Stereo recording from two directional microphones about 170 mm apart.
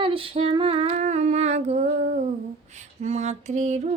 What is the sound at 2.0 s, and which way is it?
Humming, 55° right (ahead or behind).